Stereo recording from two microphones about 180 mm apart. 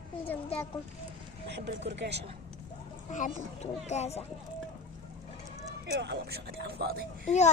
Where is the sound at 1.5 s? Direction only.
75° right (ahead or behind).